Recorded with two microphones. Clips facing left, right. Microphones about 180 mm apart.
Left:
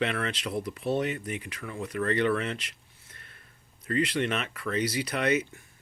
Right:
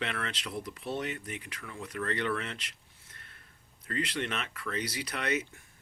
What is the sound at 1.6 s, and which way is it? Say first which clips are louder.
Speech: left 6 dB; 55° left (ahead or behind).